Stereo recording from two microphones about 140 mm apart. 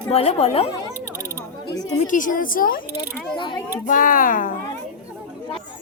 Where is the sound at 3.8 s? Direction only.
75° left (ahead or behind).